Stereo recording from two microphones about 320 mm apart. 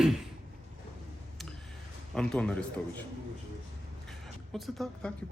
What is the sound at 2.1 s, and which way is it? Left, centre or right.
Speech, centre.